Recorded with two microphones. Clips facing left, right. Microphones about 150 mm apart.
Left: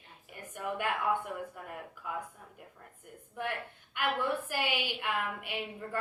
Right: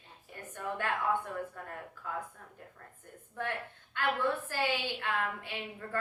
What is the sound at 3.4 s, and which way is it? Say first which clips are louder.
A woman's voice: even; 15° left (ahead or behind).